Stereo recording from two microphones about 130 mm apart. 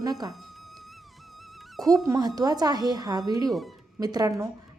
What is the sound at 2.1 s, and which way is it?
A woman's voice, 30° right (ahead or behind).